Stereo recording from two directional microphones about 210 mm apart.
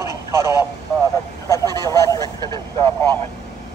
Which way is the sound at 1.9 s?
15° left (ahead or behind).